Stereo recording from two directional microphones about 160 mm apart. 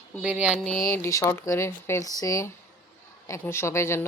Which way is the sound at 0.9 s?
20° left (ahead or behind).